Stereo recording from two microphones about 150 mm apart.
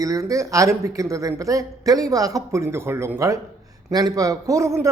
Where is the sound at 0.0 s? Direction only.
20° right (ahead or behind).